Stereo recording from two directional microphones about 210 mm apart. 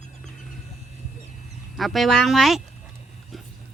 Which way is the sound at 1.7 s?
Centre (ahead or behind).